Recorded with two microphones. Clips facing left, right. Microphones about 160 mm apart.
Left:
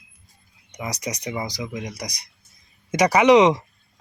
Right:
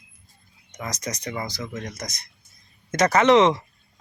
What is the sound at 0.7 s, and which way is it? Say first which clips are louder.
Speech: left 2 dB; 15° left (ahead or behind).